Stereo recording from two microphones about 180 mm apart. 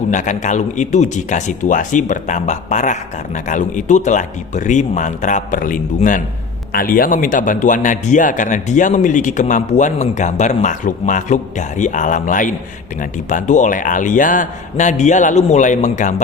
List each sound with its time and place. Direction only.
0.1 s a man's voice: 45° left (ahead or behind)